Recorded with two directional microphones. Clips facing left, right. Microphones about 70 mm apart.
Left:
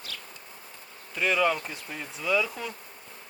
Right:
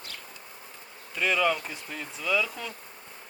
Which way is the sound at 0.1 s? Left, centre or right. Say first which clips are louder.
Left 2 dB; right.